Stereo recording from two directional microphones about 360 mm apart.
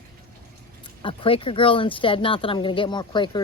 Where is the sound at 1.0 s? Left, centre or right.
Centre.